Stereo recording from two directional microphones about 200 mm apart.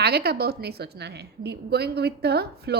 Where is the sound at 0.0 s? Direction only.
50° right (ahead or behind).